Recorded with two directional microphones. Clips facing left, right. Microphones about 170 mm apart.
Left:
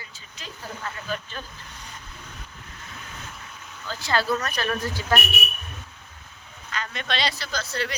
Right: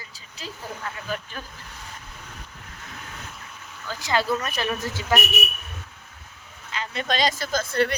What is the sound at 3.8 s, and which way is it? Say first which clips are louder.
Speech: right 1 dB; 20° right (ahead or behind).